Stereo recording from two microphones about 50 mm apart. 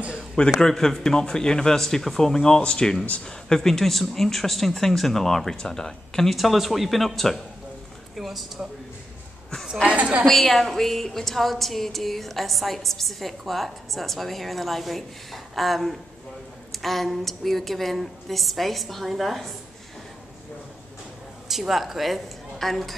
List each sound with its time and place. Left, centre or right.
0.5 s speech: centre
6.3 s speech: centre
9.8 s a woman's voice: right
10.2 s speech: centre
21.5 s a woman's voice: centre